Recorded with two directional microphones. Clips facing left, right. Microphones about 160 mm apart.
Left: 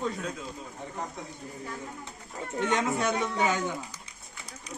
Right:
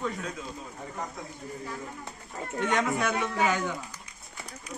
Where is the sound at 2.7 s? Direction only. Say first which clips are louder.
Even; 25° left (ahead or behind).